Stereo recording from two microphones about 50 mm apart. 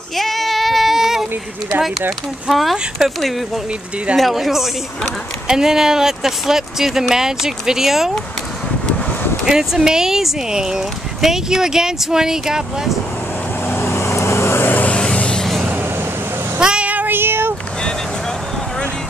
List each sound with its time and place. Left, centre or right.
0.1 s child singing: centre
1.8 s speech: centre
9.5 s speech: centre
13.7 s vehicle: left
14.9 s vehicle: left
15.4 s train: centre
16.5 s meow: centre
16.9 s child singing: right